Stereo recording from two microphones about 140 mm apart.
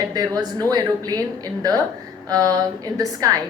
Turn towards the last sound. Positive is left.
turn(degrees=-25)  # may be behind; listen again after turning